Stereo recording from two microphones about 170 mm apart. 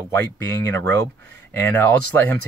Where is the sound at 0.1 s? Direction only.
15° left (ahead or behind).